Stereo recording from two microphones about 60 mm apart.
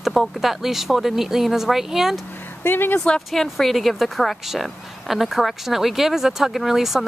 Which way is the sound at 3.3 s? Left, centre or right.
Centre.